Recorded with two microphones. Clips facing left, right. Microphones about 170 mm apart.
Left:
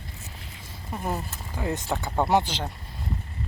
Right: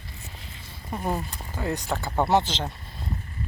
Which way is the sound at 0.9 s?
10° left (ahead or behind).